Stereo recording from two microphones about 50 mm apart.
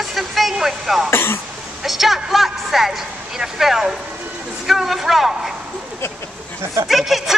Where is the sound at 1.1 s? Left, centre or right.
Left.